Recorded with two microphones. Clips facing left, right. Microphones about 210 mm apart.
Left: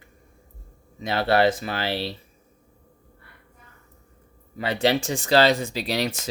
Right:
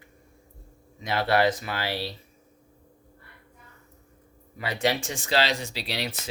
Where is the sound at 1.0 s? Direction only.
30° left (ahead or behind).